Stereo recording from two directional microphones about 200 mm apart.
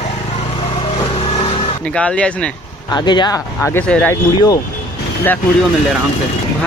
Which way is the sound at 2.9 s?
20° left (ahead or behind).